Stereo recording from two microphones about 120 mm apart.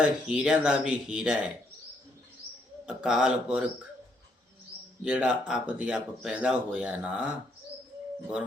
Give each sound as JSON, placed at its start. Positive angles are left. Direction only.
{"t": 0.0, "sound": "speech", "side_deg": -5}
{"t": 2.8, "sound": "speech", "side_deg": -5}
{"t": 5.0, "sound": "speech", "side_deg": -5}